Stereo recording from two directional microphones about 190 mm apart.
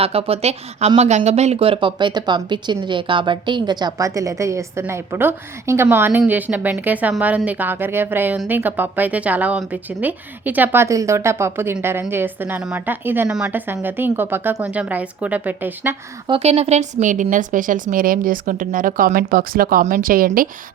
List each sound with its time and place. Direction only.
0.0 s speech: 30° right (ahead or behind); by 16.0 s 10° right (ahead or behind)
16.2 s speech: 30° right (ahead or behind); by 20.5 s 50° right (ahead or behind)